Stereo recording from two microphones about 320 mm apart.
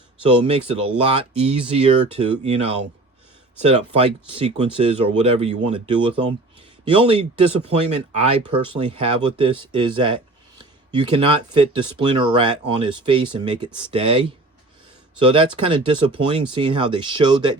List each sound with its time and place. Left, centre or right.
0.3 s speech: centre
3.6 s speech: centre